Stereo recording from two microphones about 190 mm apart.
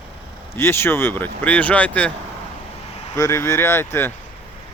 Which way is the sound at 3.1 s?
15° left (ahead or behind).